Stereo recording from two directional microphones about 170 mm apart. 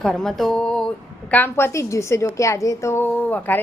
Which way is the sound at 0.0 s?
Centre (ahead or behind).